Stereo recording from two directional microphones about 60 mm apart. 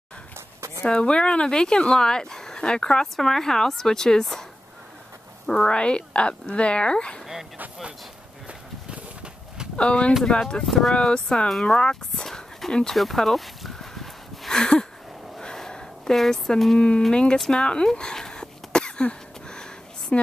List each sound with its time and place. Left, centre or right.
0.8 s speech: centre
5.5 s speech: centre
8.5 s horse: centre
9.8 s speech: centre
10.6 s speech: centre
11.0 s speech: centre
15.3 s a sound: centre
17.1 s speech: centre
17.5 s cough: centre